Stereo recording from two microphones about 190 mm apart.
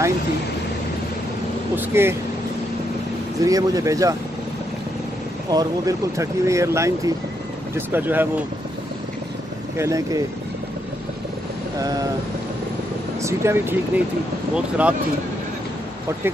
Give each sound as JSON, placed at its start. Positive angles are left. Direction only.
{"t": 1.8, "sound": "speech", "side_deg": -10}
{"t": 3.4, "sound": "speech", "side_deg": -20}
{"t": 5.5, "sound": "speech", "side_deg": -20}
{"t": 9.8, "sound": "speech", "side_deg": -15}
{"t": 13.2, "sound": "speech", "side_deg": -15}